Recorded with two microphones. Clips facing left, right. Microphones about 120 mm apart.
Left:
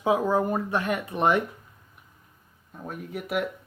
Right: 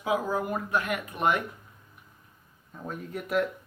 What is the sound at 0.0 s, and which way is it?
Speech, 30° left (ahead or behind).